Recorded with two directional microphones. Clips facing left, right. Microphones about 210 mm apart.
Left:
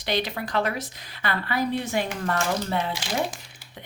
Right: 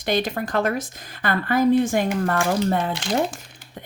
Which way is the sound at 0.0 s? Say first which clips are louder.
Right 4 dB; 45° right (ahead or behind).